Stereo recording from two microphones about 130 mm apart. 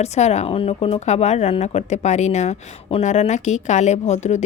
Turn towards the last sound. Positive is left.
turn(degrees=60)  # may be behind; listen again after turning